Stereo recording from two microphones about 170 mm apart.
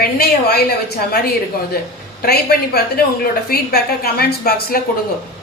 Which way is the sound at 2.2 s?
70° left (ahead or behind).